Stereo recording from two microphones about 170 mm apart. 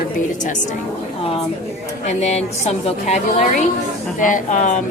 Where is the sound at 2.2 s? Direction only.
40° left (ahead or behind).